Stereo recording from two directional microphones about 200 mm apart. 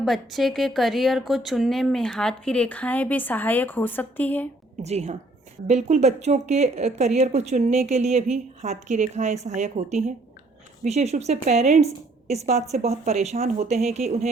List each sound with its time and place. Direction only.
0.0 s a woman's voice: centre (ahead or behind)
4.8 s speech: 35° right (ahead or behind)